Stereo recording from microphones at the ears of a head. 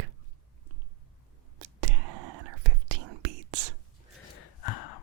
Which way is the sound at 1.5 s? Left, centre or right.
Right.